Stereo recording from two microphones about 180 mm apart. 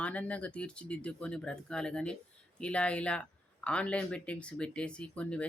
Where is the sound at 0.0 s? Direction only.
10° left (ahead or behind).